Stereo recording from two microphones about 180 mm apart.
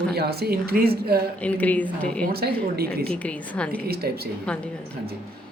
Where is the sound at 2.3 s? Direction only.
60° right (ahead or behind).